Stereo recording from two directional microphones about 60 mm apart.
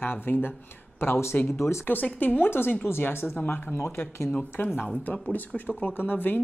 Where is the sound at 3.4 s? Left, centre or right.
Left.